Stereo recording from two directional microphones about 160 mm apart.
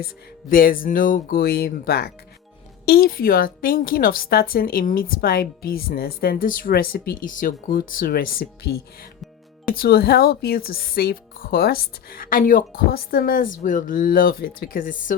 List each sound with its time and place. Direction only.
0.0 s a woman's voice: 60° left (ahead or behind)